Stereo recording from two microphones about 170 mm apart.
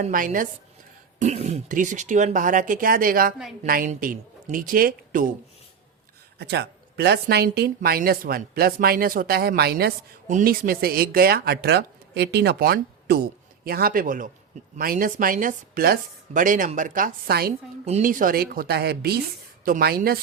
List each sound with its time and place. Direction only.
0.1 s a woman's voice: 55° right (ahead or behind)
1.2 s a woman's voice: 40° right (ahead or behind)
6.4 s speech: 75° right (ahead or behind)
10.2 s a woman's voice: 55° right (ahead or behind)
18.0 s speech: 55° right (ahead or behind)